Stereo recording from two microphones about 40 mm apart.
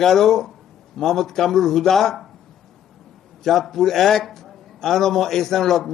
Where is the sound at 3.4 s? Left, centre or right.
Centre.